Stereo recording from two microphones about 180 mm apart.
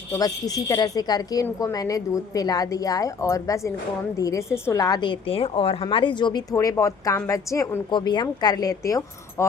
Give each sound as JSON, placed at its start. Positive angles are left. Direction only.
{"t": 0.1, "sound": "a woman's voice", "side_deg": 20}